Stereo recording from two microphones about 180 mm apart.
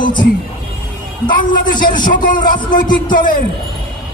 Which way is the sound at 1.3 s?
50° left (ahead or behind).